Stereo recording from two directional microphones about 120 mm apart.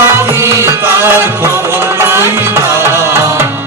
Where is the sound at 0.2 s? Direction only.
20° right (ahead or behind).